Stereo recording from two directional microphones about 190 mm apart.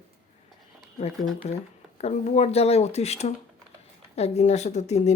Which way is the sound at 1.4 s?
35° left (ahead or behind).